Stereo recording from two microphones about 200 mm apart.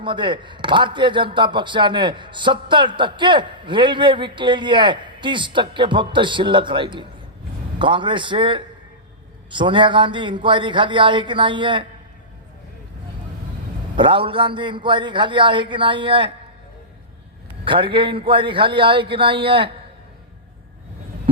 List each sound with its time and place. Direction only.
0.0 s a man's voice: 25° right (ahead or behind)
13.9 s a man's voice: 25° right (ahead or behind)
17.7 s a man's voice: 25° right (ahead or behind)